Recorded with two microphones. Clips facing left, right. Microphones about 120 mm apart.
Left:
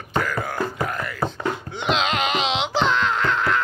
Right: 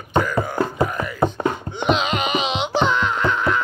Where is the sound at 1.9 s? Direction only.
5° right (ahead or behind).